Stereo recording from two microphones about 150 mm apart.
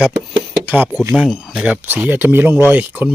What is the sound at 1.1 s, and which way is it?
Speech, 5° right (ahead or behind).